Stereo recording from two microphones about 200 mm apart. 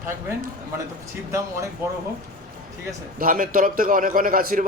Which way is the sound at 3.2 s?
45° right (ahead or behind).